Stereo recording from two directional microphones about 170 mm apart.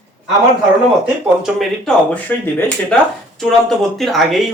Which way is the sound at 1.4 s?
Centre (ahead or behind).